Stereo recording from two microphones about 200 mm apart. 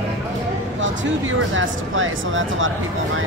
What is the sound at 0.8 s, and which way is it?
Speech, 75° right (ahead or behind).